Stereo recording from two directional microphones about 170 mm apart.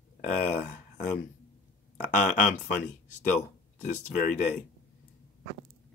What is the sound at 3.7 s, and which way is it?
Speech, 55° left (ahead or behind).